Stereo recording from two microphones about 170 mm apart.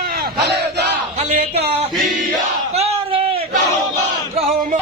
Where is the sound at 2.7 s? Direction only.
40° right (ahead or behind).